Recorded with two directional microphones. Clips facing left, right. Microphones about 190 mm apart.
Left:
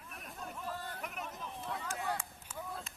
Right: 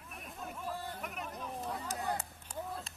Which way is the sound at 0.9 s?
Centre (ahead or behind).